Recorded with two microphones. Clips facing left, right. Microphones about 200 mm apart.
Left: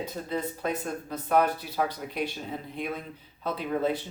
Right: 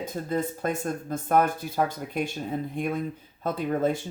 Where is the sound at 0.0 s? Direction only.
45° right (ahead or behind).